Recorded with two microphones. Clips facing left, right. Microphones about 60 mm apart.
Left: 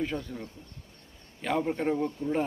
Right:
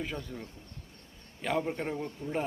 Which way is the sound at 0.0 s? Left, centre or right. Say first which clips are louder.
Left 5 dB; centre.